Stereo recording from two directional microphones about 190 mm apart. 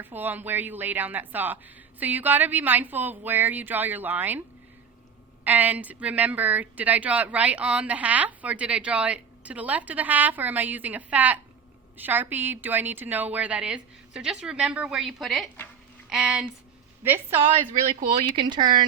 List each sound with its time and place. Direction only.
0.0 s a woman's voice: 10° right (ahead or behind)
5.5 s a woman's voice: 10° right (ahead or behind)
18.1 s speech: 25° right (ahead or behind)